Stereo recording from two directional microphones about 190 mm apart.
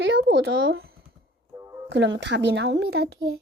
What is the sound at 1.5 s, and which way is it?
Music, 20° right (ahead or behind).